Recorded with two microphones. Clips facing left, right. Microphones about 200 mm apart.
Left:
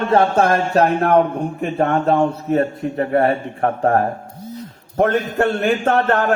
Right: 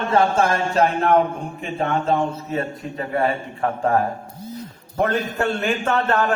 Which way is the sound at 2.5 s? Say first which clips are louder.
Left 8 dB; 60° left (ahead or behind).